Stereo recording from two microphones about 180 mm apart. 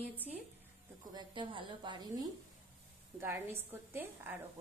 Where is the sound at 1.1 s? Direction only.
25° right (ahead or behind).